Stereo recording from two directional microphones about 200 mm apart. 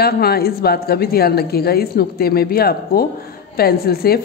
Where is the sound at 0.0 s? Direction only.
50° left (ahead or behind).